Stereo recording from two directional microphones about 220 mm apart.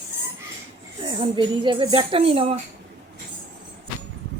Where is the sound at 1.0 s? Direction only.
20° right (ahead or behind).